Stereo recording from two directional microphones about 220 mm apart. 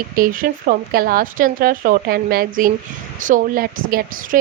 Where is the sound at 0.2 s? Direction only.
40° right (ahead or behind).